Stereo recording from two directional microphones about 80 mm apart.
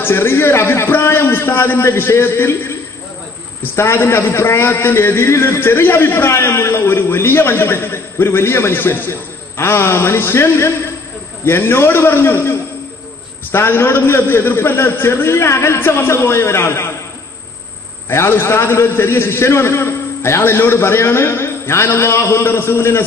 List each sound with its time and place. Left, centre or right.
0.0 s a man's voice: left
3.7 s a man's voice: left
18.0 s a man's voice: left